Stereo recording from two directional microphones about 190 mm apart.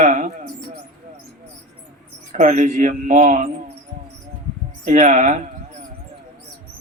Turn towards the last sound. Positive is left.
turn(degrees=-40)  # may be behind; listen again after turning